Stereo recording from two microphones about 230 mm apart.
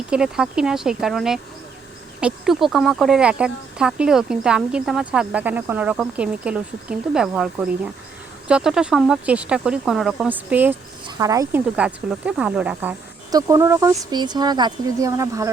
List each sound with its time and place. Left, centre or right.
0.1 s speech: centre